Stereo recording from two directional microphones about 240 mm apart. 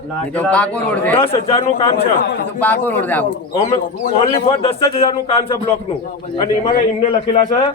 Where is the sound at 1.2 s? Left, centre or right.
Left.